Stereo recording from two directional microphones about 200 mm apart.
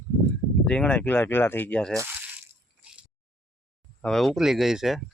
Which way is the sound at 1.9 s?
10° right (ahead or behind).